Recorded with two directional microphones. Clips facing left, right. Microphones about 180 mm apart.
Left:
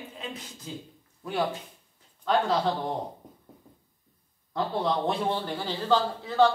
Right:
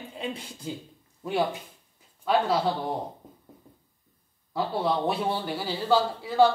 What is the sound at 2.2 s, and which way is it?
Speech, 5° right (ahead or behind).